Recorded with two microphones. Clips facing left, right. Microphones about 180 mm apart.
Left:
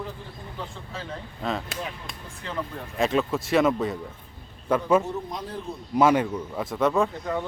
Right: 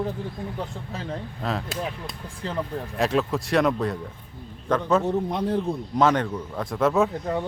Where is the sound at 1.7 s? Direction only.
40° right (ahead or behind).